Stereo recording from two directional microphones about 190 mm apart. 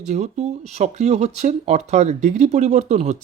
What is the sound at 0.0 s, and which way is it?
Speech, 40° right (ahead or behind).